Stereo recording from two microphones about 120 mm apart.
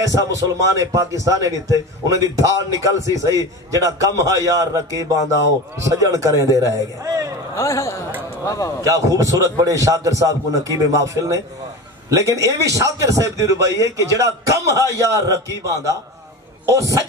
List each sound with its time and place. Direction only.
0.0 s a man's voice: 30° right (ahead or behind)
7.5 s a man's voice: 25° left (ahead or behind)
8.8 s a man's voice: 30° right (ahead or behind)